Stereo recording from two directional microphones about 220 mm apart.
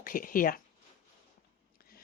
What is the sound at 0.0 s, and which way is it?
Speech, 40° left (ahead or behind).